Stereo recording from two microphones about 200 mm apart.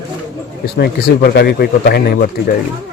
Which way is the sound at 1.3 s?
55° left (ahead or behind).